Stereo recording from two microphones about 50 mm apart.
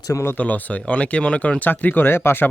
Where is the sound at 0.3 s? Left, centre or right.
Left.